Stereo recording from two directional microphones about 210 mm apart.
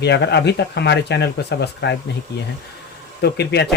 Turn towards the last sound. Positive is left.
turn(degrees=50)  # may be behind; listen again after turning